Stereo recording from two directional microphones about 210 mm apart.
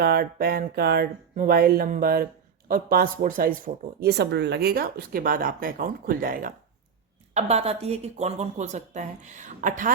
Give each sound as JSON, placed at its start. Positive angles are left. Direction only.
{"t": 0.0, "sound": "speech", "side_deg": -45}
{"t": 7.3, "sound": "speech", "side_deg": -30}